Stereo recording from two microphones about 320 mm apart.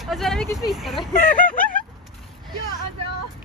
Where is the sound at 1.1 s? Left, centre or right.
Left.